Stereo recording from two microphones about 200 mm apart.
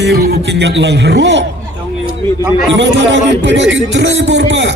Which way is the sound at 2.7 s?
65° right (ahead or behind).